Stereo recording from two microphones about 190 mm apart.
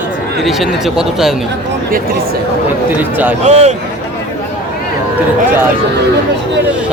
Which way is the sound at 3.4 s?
35° right (ahead or behind).